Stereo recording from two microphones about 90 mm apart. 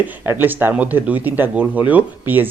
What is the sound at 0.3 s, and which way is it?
Speech, 25° right (ahead or behind).